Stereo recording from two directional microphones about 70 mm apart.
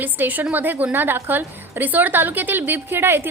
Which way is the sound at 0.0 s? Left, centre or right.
Right.